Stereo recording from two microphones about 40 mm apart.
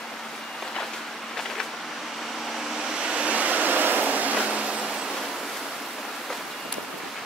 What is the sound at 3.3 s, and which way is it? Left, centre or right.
Vehicle, right.